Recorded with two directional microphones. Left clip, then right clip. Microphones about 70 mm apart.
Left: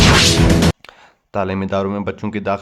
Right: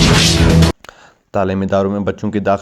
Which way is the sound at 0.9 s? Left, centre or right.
Centre.